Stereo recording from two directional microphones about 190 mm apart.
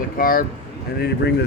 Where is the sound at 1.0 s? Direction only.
60° left (ahead or behind).